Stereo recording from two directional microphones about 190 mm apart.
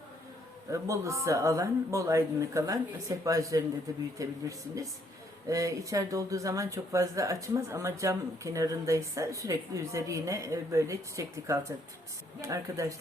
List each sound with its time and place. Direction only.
0.7 s speech: 15° right (ahead or behind)